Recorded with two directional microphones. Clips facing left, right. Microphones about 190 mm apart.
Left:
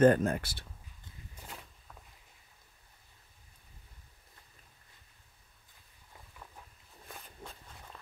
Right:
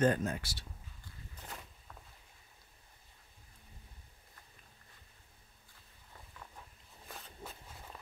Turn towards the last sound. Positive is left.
turn(degrees=-5)  # may be behind; listen again after turning